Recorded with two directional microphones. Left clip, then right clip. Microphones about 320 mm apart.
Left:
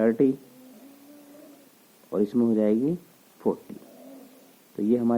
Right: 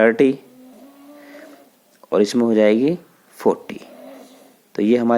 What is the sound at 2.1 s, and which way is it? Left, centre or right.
Speech, centre.